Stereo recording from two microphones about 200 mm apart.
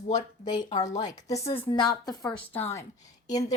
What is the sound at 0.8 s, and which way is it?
A woman's voice, 20° left (ahead or behind).